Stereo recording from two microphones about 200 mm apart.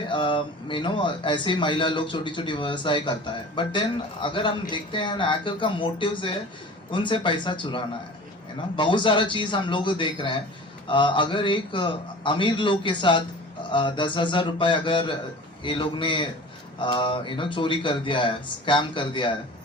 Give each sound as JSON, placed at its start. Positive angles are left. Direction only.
{"t": 0.1, "sound": "a man's voice", "side_deg": 25}